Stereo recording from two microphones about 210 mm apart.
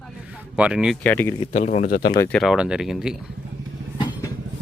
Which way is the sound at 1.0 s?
10° left (ahead or behind).